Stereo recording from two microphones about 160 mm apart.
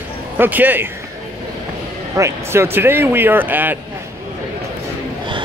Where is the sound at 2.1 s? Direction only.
15° right (ahead or behind).